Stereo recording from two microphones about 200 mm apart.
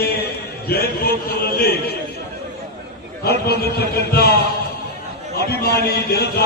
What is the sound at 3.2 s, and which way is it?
A man's voice, 55° left (ahead or behind).